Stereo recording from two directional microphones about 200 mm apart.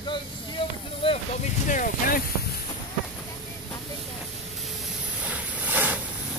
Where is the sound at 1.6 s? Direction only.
40° left (ahead or behind).